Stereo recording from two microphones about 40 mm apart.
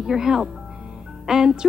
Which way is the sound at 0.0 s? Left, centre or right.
Centre.